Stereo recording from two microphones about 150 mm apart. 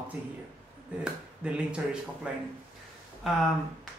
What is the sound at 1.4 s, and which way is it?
Speech, 5° right (ahead or behind).